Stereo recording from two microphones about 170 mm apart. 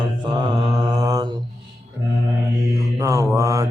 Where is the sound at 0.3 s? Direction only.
25° right (ahead or behind).